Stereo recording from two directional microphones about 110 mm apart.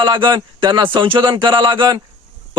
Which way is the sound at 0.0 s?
45° right (ahead or behind).